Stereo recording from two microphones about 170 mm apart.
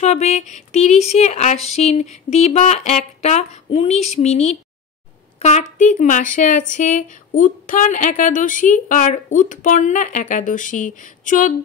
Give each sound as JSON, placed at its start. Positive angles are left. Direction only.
{"t": 0.0, "sound": "speech", "side_deg": 40}